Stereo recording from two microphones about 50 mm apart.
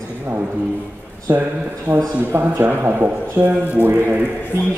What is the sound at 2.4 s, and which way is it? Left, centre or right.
Speech, right.